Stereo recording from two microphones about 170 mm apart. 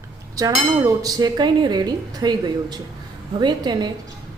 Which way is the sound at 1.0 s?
20° right (ahead or behind).